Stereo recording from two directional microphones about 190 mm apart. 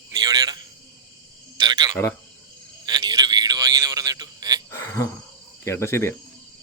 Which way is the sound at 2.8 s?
20° right (ahead or behind).